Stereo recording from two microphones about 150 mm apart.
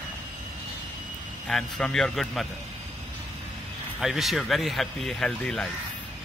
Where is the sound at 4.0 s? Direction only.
Centre (ahead or behind).